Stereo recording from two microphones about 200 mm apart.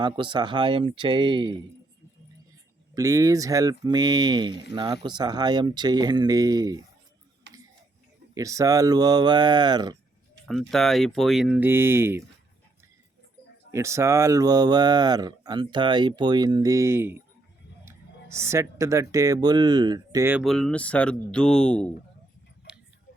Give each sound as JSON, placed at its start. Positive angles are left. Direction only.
{"t": 0.0, "sound": "speech", "side_deg": -20}
{"t": 2.9, "sound": "speech", "side_deg": -15}
{"t": 7.5, "sound": "a sound", "side_deg": -60}
{"t": 8.4, "sound": "speech", "side_deg": -15}
{"t": 10.4, "sound": "speech", "side_deg": 0}
{"t": 13.7, "sound": "speech", "side_deg": -15}
{"t": 20.4, "sound": "speech", "side_deg": 0}